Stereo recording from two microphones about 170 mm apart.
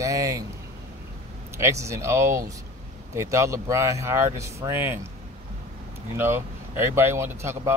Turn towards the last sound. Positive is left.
turn(degrees=-15)  # may be behind; listen again after turning